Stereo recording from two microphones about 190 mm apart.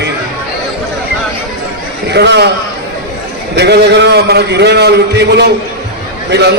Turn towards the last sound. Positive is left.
turn(degrees=-60)  # may be behind; listen again after turning